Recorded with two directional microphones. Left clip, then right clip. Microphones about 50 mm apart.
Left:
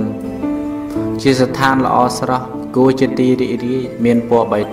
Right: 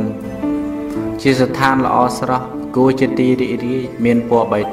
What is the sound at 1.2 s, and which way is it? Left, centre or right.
A man's voice, left.